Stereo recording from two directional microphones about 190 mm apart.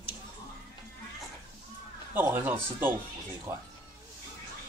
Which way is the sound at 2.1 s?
10° right (ahead or behind).